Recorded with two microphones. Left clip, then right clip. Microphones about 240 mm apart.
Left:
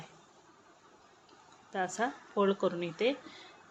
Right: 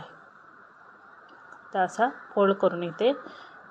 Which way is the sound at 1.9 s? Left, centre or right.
Left.